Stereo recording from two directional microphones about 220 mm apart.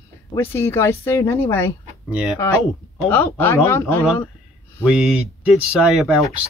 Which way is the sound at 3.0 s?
10° left (ahead or behind).